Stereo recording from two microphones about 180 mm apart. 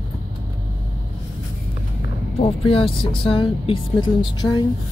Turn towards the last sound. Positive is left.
turn(degrees=25)  # may be behind; listen again after turning